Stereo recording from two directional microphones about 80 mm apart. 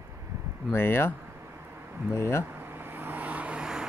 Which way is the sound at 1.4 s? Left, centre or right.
Right.